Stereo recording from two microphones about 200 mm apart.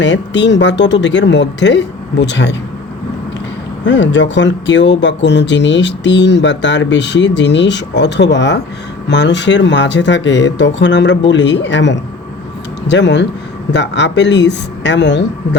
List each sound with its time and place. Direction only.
0.0 s speech: 65° left (ahead or behind)
3.8 s speech: 65° left (ahead or behind)